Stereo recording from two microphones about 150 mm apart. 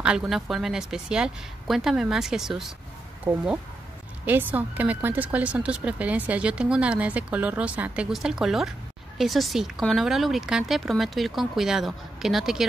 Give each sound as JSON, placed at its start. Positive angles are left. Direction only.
{"t": 0.0, "sound": "speech", "side_deg": -5}
{"t": 3.3, "sound": "speech", "side_deg": -15}